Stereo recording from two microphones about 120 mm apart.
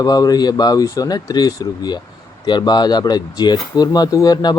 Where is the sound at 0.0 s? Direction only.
30° left (ahead or behind).